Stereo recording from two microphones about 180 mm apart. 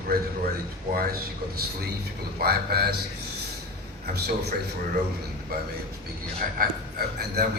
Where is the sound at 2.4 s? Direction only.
60° right (ahead or behind).